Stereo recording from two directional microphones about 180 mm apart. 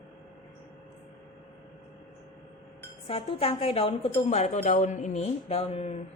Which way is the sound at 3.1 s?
35° left (ahead or behind).